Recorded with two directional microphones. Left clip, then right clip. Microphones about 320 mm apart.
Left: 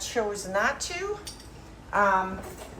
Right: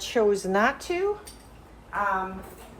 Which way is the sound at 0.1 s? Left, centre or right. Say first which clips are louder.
Right 6 dB; right.